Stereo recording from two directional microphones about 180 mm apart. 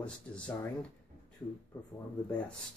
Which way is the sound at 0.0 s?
5° left (ahead or behind).